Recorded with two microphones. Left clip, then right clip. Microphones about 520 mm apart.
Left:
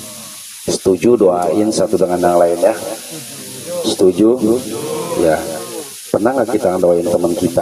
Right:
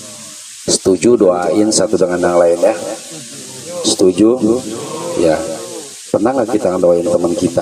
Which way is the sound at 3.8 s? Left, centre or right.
Centre.